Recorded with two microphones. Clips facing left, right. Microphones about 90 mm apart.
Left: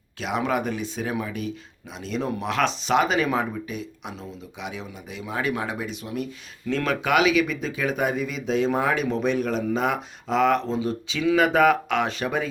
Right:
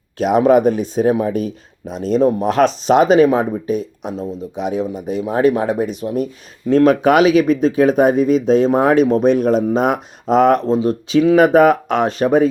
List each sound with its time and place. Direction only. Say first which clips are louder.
0.2 s speech: right 13 dB; 45° right (ahead or behind)